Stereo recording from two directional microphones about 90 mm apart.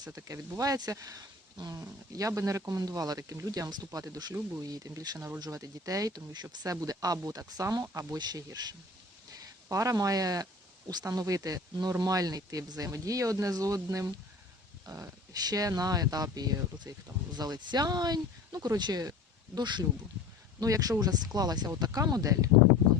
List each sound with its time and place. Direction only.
0.2 s speech: 40° right (ahead or behind)
1.7 s speech: 35° right (ahead or behind)
9.6 s speech: 40° right (ahead or behind); by 19.8 s 55° right (ahead or behind)
20.6 s speech: 45° right (ahead or behind)